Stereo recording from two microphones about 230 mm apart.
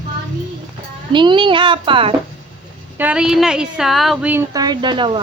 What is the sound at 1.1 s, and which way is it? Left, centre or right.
A child's voice, centre.